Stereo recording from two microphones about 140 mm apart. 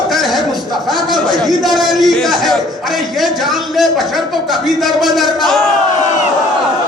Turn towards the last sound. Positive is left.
turn(degrees=0)  # may be behind; listen again after turning